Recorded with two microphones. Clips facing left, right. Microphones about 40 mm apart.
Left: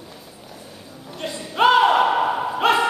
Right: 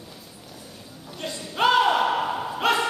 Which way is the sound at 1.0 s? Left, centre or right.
Centre.